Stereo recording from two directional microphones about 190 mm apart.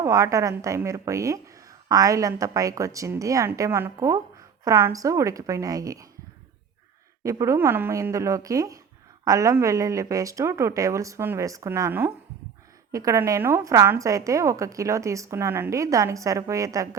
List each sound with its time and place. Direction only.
0.0 s a woman's voice: 15° right (ahead or behind)
7.3 s a woman's voice: 15° right (ahead or behind)